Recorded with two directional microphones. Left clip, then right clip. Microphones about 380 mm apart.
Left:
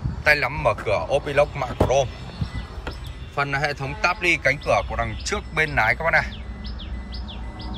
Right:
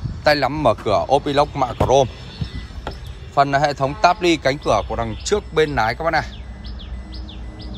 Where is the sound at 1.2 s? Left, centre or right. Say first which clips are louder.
Right 2 dB; centre.